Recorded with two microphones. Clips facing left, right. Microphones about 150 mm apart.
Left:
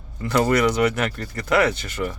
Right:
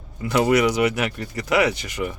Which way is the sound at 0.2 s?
10° right (ahead or behind).